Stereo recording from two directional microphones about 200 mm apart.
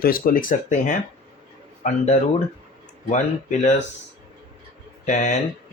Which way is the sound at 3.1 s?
35° left (ahead or behind).